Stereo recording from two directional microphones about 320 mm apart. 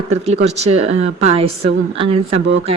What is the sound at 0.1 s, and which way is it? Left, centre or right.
A woman's voice, centre.